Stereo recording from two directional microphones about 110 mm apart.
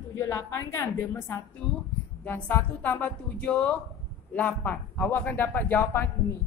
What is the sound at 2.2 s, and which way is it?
A woman's voice, 15° left (ahead or behind).